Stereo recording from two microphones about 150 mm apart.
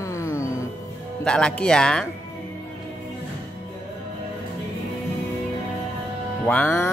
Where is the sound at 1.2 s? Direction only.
5° left (ahead or behind).